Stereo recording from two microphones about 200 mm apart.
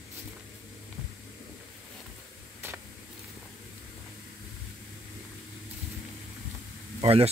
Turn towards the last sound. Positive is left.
turn(degrees=-30)  # may be behind; listen again after turning